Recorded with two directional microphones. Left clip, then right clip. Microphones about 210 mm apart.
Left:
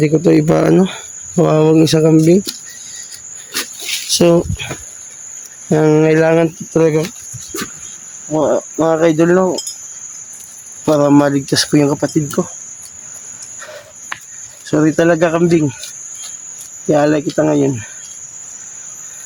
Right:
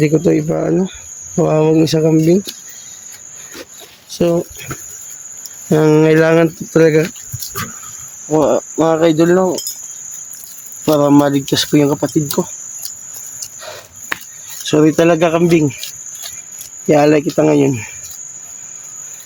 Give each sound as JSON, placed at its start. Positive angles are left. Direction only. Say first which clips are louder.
{"t": 0.3, "sound": "speech", "louder": "left 4 dB", "side_deg": 55}
{"t": 0.7, "sound": "speech", "louder": "left 4 dB", "side_deg": 35}
{"t": 1.4, "sound": "speech", "louder": "left 1 dB", "side_deg": 15}
{"t": 4.1, "sound": "speech", "louder": "left 4 dB", "side_deg": 15}
{"t": 5.6, "sound": "cricket", "louder": "right 1 dB", "side_deg": -5}
{"t": 8.3, "sound": "speech", "louder": "right 1 dB", "side_deg": -15}
{"t": 10.8, "sound": "speech", "louder": "even", "side_deg": 5}
{"t": 14.7, "sound": "speech", "louder": "right 1 dB", "side_deg": -5}
{"t": 16.9, "sound": "cricket", "louder": "right 2 dB", "side_deg": -20}